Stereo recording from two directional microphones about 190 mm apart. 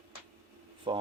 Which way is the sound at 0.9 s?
25° right (ahead or behind).